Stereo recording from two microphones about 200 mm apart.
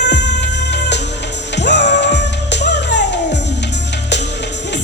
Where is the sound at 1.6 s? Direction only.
60° left (ahead or behind).